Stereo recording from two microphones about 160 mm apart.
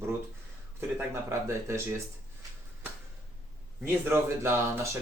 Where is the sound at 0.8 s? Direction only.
15° right (ahead or behind).